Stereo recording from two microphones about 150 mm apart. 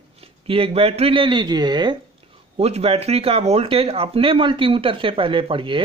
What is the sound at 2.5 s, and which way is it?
Speech, 45° right (ahead or behind).